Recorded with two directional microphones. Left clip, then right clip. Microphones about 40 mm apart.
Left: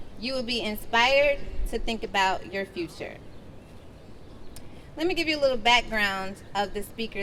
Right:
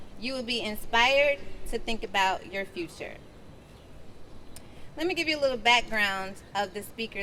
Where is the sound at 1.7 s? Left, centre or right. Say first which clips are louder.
Left 2 dB; centre.